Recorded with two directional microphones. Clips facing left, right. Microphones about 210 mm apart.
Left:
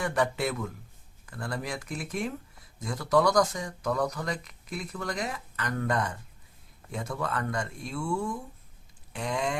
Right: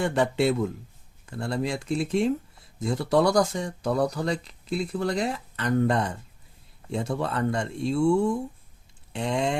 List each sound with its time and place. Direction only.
0.0 s speech: 25° right (ahead or behind)